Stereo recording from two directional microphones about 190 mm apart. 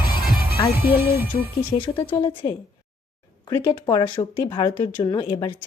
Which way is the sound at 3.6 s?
25° left (ahead or behind).